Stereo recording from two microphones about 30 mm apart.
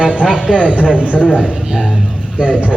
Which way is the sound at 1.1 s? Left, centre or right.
Left.